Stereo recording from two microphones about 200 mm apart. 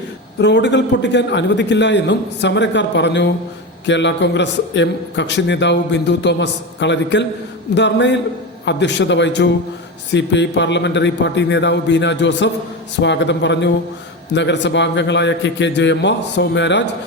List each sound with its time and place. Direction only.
0.3 s a man's voice: 60° left (ahead or behind)